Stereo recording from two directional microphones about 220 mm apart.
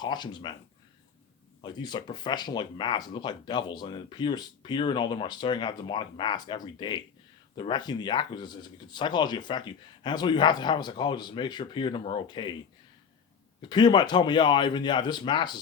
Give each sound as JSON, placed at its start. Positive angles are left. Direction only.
{"t": 0.0, "sound": "speech", "side_deg": 20}
{"t": 1.6, "sound": "speech", "side_deg": 20}
{"t": 13.6, "sound": "speech", "side_deg": 20}